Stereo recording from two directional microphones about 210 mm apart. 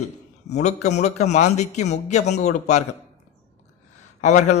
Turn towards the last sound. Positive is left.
turn(degrees=35)  # may be behind; listen again after turning